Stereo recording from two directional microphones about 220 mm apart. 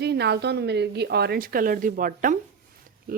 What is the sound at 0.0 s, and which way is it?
Speech, 50° right (ahead or behind).